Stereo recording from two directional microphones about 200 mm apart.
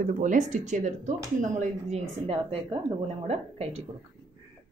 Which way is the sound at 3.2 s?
30° right (ahead or behind).